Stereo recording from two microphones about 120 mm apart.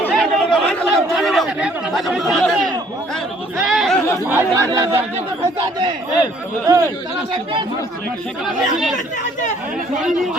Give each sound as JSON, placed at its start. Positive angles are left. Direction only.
{"t": 0.1, "sound": "chatter", "side_deg": 0}
{"t": 3.7, "sound": "a sound", "side_deg": 0}
{"t": 4.3, "sound": "speech", "side_deg": -20}
{"t": 6.7, "sound": "speech", "side_deg": -25}